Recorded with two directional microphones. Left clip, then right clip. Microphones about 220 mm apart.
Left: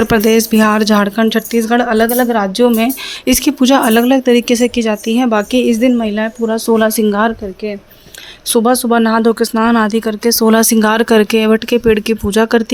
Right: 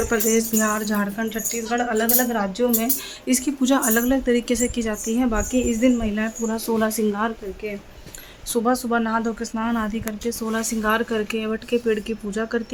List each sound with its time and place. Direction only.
0.1 s speech: 40° left (ahead or behind)